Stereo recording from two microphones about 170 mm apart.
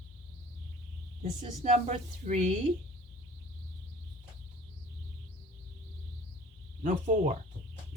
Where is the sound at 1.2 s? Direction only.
40° right (ahead or behind).